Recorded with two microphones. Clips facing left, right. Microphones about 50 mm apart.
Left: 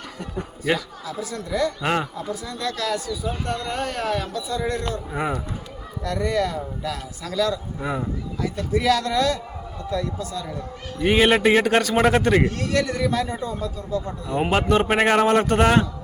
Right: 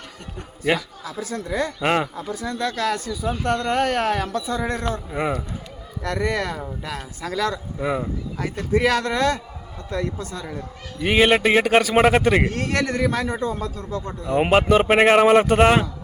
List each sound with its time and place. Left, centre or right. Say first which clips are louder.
1.0 s speech: right 1 dB; right
1.8 s a man's voice: right 2 dB; right
2.3 s speech: right 3 dB; right
3.4 s a man's voice: right 9 dB; right
5.1 s speech: right 1 dB; centre
6.0 s speech: left 1 dB; right
7.8 s speech: right 3 dB; centre
8.4 s speech: right 3 dB; right
11.0 s speech: even; centre
12.5 s a man's voice: even; right
14.8 s a man's voice: right 4 dB; right